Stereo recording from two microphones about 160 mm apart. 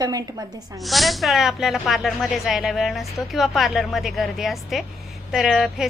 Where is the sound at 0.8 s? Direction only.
Centre (ahead or behind).